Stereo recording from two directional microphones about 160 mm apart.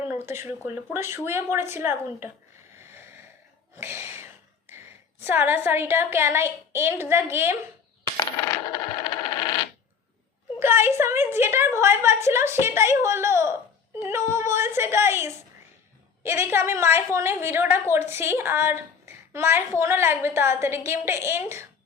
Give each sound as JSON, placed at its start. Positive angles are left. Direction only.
{"t": 0.1, "sound": "a woman's voice", "side_deg": -15}
{"t": 3.8, "sound": "gasp", "side_deg": -15}
{"t": 5.2, "sound": "a woman's voice", "side_deg": -15}
{"t": 9.0, "sound": "a sound", "side_deg": 25}
{"t": 10.6, "sound": "a woman's voice", "side_deg": -15}